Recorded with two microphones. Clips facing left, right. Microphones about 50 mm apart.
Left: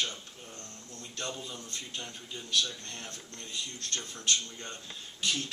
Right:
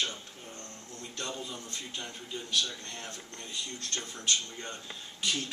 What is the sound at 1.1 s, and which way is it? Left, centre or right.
A man's voice, centre.